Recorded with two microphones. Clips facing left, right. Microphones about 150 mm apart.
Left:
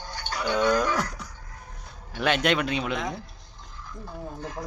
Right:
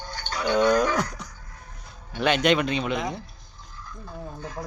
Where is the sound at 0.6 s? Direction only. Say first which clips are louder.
Right 3 dB; 15° right (ahead or behind).